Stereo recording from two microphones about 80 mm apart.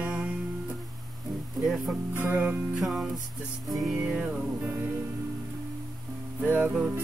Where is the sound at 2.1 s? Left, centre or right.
Right.